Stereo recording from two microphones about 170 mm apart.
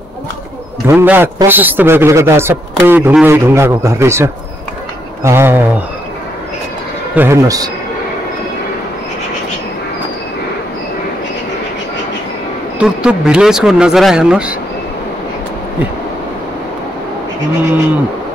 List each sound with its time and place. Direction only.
0.8 s a man's voice: 10° right (ahead or behind)
7.2 s speech: 15° right (ahead or behind)
12.7 s speech: 5° right (ahead or behind)